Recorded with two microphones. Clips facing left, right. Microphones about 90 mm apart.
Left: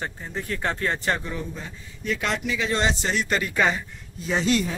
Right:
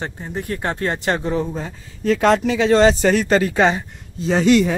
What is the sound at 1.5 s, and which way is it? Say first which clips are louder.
Speech: right 8 dB; 40° right (ahead or behind).